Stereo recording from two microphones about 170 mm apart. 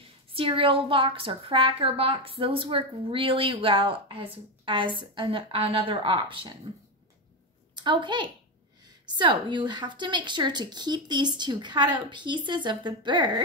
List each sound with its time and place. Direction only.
0.3 s a woman's voice: 30° right (ahead or behind)
7.7 s a woman's voice: 25° right (ahead or behind)